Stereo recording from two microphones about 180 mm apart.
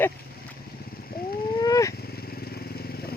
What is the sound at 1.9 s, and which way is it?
Motorcycle, 60° left (ahead or behind).